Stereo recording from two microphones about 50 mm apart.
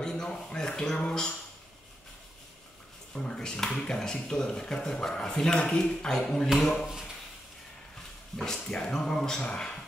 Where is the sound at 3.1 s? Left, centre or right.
Centre.